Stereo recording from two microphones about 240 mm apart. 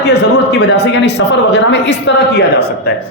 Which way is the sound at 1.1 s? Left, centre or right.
Left.